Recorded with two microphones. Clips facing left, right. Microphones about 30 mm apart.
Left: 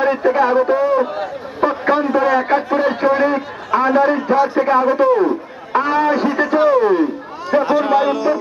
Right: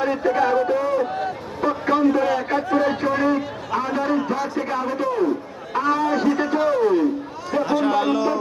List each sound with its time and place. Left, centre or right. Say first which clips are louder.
0.0 s a man's voice: left 5 dB; left; by 8.4 s centre